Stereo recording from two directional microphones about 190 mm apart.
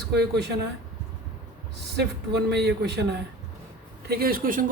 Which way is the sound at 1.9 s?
60° right (ahead or behind).